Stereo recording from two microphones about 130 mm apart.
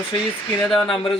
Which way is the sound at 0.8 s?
5° left (ahead or behind).